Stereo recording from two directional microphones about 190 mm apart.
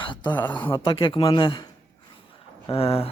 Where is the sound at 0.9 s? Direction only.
25° left (ahead or behind).